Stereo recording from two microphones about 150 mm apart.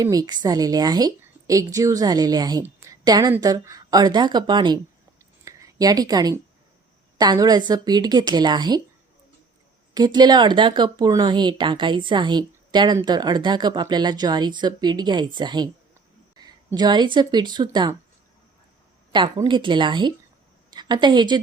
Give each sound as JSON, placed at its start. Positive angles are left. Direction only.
{"t": 0.0, "sound": "speech", "side_deg": -25}
{"t": 2.9, "sound": "a sound", "side_deg": -25}
{"t": 3.4, "sound": "speech", "side_deg": -25}
{"t": 9.9, "sound": "speech", "side_deg": -30}
{"t": 16.7, "sound": "speech", "side_deg": -30}
{"t": 19.1, "sound": "a woman's voice", "side_deg": -30}